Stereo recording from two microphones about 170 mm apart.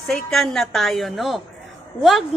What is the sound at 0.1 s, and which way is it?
A woman's voice, centre (ahead or behind).